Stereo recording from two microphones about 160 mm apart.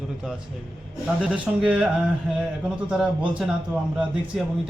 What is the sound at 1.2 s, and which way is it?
A man's voice, 5° right (ahead or behind).